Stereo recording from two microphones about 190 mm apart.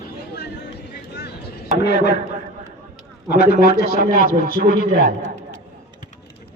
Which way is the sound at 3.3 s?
55° left (ahead or behind).